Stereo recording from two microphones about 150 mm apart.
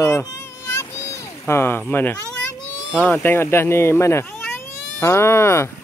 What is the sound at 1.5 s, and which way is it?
Speech, 15° left (ahead or behind).